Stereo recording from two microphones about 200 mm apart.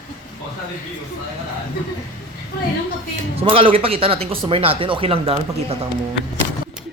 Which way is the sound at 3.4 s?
25° right (ahead or behind).